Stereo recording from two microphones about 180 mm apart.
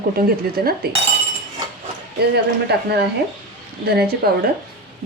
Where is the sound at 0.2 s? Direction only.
55° right (ahead or behind).